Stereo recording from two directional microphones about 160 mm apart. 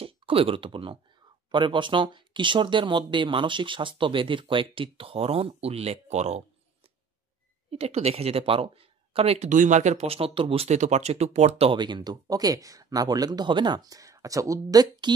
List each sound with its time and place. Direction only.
0.0 s speech: 35° right (ahead or behind)
7.7 s speech: 40° right (ahead or behind)